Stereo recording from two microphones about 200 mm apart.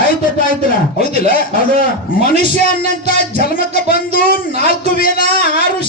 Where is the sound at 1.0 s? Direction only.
45° left (ahead or behind).